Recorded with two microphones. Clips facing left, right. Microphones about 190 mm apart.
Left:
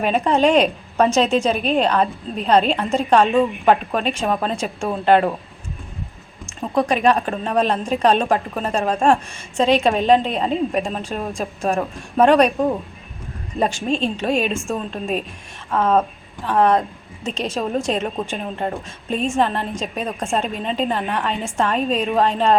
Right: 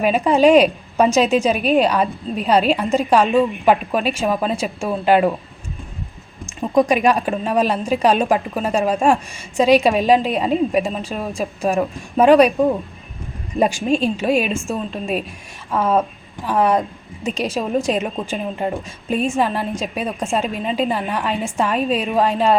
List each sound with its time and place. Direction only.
0.0 s a woman's voice: 5° right (ahead or behind)
6.7 s a woman's voice: 10° right (ahead or behind)
13.6 s a woman's voice: 10° right (ahead or behind)